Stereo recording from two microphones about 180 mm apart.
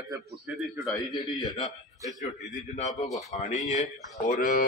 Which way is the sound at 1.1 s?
25° left (ahead or behind).